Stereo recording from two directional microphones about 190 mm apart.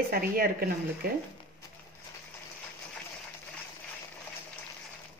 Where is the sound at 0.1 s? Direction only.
50° right (ahead or behind).